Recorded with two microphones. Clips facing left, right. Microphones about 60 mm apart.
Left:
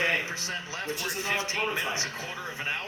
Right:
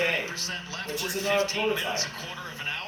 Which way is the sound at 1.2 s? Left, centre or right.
Left.